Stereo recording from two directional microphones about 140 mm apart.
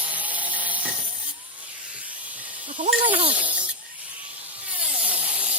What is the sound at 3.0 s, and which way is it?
Speech, 40° right (ahead or behind).